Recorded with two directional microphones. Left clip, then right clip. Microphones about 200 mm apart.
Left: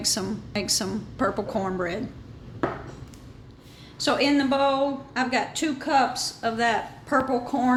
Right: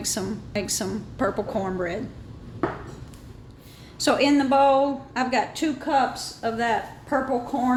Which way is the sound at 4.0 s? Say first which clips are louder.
Right 2 dB; 20° right (ahead or behind).